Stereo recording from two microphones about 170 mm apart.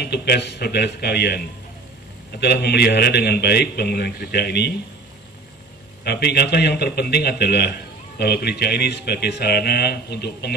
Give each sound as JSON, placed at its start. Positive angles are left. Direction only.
{"t": 0.0, "sound": "a man's voice", "side_deg": 70}
{"t": 6.0, "sound": "a man's voice", "side_deg": 75}